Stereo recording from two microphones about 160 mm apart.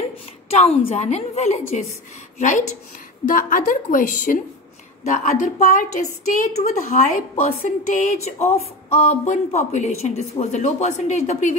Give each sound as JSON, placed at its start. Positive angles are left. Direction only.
{"t": 0.5, "sound": "a woman's voice", "side_deg": 40}